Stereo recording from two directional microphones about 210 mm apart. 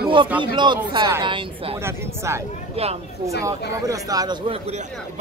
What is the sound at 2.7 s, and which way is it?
Speech, 30° right (ahead or behind).